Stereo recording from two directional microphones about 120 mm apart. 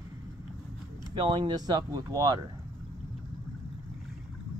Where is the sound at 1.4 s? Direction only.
35° right (ahead or behind).